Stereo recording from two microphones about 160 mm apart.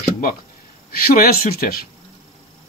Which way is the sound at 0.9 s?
65° left (ahead or behind).